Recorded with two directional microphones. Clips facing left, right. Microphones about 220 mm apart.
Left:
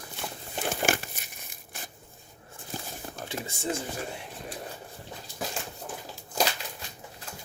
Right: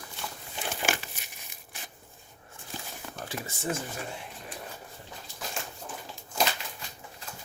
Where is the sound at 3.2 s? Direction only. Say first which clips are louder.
Left 1 dB; 25° left (ahead or behind).